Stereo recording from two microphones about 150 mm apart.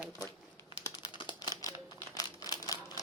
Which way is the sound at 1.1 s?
30° left (ahead or behind).